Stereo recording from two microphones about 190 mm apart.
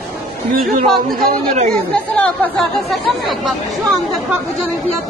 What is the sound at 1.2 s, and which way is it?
Speech, 40° right (ahead or behind).